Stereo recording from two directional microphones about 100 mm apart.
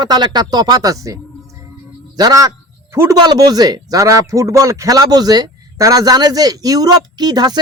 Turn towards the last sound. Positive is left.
turn(degrees=-45)  # may be behind; listen again after turning